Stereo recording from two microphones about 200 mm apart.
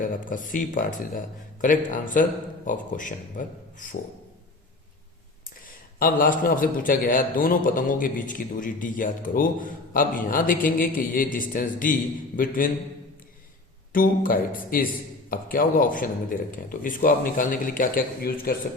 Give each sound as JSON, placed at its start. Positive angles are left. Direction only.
{"t": 0.0, "sound": "speech", "side_deg": 40}
{"t": 5.6, "sound": "a man's voice", "side_deg": 45}
{"t": 13.9, "sound": "a man's voice", "side_deg": 45}